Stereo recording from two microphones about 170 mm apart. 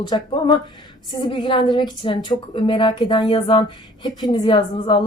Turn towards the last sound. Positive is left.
turn(degrees=30)  # may be behind; listen again after turning